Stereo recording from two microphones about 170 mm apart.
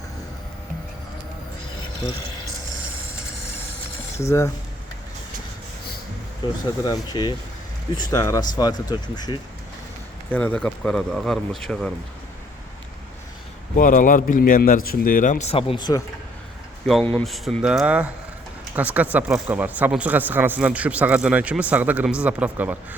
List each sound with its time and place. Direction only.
4.2 s speech: 15° left (ahead or behind)
6.8 s speech: 25° left (ahead or behind)
10.3 s speech: 10° left (ahead or behind)
13.7 s a man's voice: 50° left (ahead or behind); by 16.0 s 25° left (ahead or behind)
16.8 s speech: 5° left (ahead or behind)
17.3 s speech: centre (ahead or behind)